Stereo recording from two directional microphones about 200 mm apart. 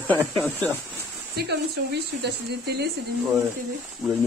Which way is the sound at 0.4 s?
10° left (ahead or behind).